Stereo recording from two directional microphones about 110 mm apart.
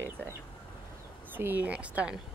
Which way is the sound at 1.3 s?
15° right (ahead or behind).